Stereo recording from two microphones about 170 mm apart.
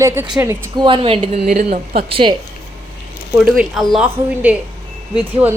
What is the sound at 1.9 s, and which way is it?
Speech, 30° right (ahead or behind).